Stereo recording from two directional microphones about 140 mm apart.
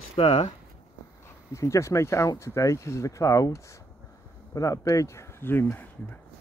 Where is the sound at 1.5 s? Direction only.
20° left (ahead or behind).